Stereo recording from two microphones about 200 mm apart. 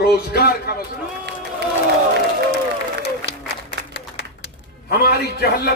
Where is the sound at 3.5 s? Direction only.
55° left (ahead or behind).